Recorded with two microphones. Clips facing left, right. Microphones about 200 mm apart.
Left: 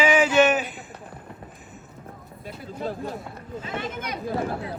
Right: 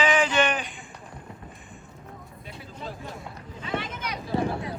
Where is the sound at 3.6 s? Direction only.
45° left (ahead or behind).